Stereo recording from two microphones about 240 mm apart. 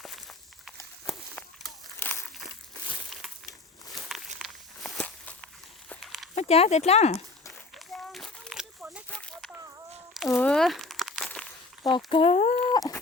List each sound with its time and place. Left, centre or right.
0.0 s walk: centre
3.1 s crushing: centre
4.4 s walk: centre
6.3 s speech: left
8.1 s a sound: centre
10.2 s crumpling: centre
11.8 s a sound: centre